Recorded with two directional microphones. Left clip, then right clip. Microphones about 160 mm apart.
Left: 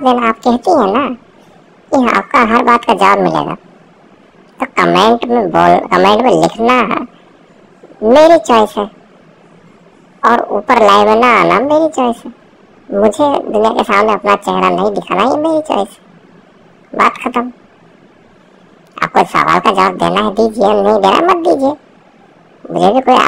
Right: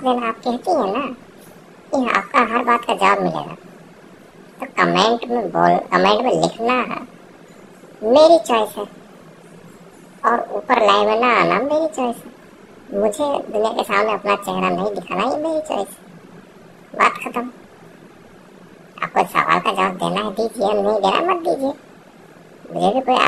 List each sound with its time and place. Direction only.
0.0 s speech: 50° left (ahead or behind)
4.6 s a woman's voice: 55° left (ahead or behind)
10.2 s speech: 60° left (ahead or behind)
17.2 s speech: 50° left (ahead or behind)
18.9 s speech: 55° left (ahead or behind)
22.8 s speech: 55° left (ahead or behind)